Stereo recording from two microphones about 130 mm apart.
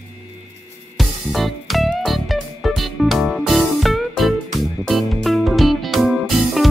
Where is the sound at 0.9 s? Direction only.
Centre (ahead or behind).